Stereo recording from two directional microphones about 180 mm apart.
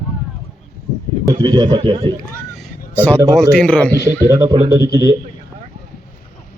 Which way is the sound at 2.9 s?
10° left (ahead or behind).